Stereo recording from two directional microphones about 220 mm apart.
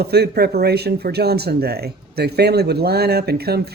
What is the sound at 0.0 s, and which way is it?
Speech, 45° right (ahead or behind).